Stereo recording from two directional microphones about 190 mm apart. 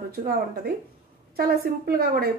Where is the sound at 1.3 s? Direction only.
55° right (ahead or behind).